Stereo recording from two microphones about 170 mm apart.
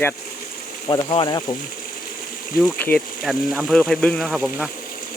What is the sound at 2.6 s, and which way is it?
Speech, 5° left (ahead or behind).